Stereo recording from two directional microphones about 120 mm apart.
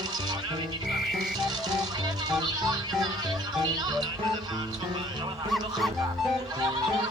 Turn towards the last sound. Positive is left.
turn(degrees=0)  # may be behind; listen again after turning